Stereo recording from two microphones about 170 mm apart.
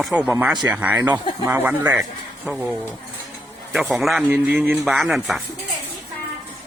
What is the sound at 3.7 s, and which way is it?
Speech, centre (ahead or behind).